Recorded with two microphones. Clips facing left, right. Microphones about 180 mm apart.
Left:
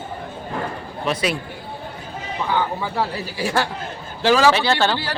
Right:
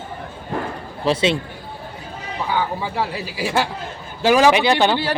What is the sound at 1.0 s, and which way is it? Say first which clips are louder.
Speech: right 4 dB; 25° right (ahead or behind).